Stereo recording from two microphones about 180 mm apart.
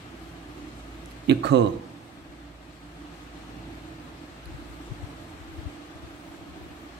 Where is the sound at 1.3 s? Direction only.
70° right (ahead or behind).